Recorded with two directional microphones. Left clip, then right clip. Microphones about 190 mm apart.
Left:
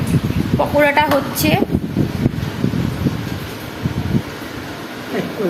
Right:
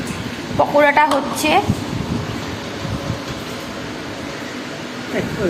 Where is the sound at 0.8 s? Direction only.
10° left (ahead or behind).